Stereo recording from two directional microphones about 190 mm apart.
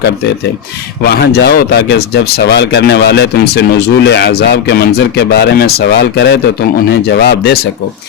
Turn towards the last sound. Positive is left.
turn(degrees=60)  # may be behind; listen again after turning